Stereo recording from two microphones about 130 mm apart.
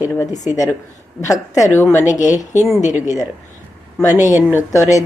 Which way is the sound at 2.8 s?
65° left (ahead or behind).